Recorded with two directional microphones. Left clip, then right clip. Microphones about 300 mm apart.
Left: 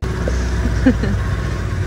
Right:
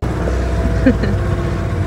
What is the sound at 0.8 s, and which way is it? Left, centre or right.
Speech, centre.